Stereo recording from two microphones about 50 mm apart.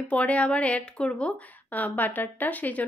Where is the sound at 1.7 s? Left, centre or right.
Left.